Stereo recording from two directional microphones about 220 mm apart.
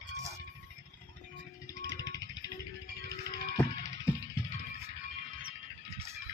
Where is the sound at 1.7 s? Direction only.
15° left (ahead or behind).